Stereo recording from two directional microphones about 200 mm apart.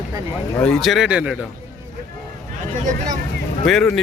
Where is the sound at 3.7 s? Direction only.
Centre (ahead or behind).